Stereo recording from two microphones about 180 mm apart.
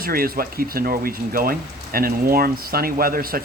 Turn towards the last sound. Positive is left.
turn(degrees=-55)  # may be behind; listen again after turning